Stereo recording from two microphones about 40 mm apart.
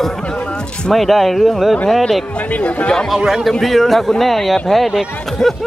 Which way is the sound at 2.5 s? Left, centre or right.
Left.